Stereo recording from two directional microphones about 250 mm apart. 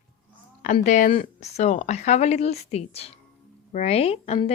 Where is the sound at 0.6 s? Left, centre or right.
Left.